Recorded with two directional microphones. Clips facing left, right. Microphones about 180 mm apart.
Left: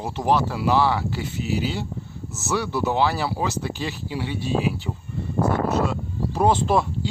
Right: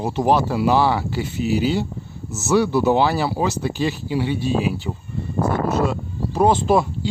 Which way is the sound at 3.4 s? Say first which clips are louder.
Right 5 dB; 25° right (ahead or behind).